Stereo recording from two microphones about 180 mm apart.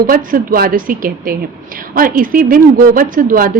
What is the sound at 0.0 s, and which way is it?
A woman's voice, 50° right (ahead or behind).